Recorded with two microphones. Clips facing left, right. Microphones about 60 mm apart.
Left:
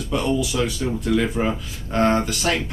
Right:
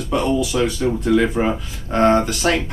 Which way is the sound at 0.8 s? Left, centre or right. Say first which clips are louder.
Right 5 dB; centre.